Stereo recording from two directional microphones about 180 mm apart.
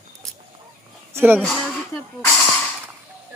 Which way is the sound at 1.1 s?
10° right (ahead or behind).